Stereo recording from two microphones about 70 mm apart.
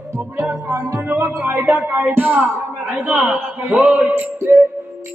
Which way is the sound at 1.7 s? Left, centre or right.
Right.